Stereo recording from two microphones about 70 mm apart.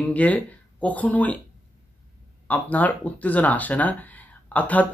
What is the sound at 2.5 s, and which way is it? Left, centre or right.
Speech, left.